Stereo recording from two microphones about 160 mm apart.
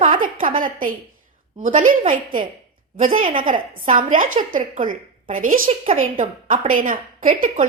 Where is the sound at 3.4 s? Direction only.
55° right (ahead or behind).